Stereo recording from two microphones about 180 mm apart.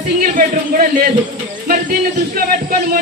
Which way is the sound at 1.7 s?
50° right (ahead or behind).